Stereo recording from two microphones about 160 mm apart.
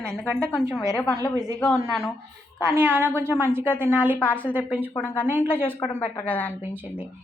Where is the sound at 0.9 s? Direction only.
15° left (ahead or behind).